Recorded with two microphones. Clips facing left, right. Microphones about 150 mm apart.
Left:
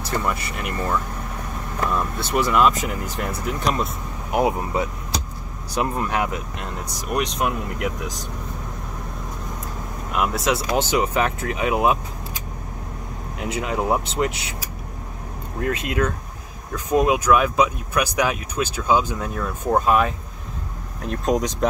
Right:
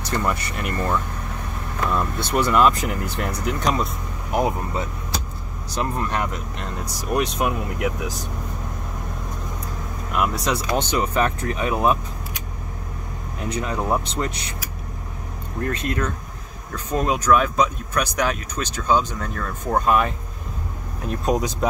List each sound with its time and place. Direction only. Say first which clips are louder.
0.0 s speech: right 1 dB; 5° left (ahead or behind)
10.1 s speech: left 1 dB; centre (ahead or behind)
13.5 s speech: left 1 dB; 5° left (ahead or behind)
15.7 s speech: left 3 dB; 10° left (ahead or behind)